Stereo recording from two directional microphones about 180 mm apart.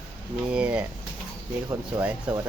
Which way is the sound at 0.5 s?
5° right (ahead or behind).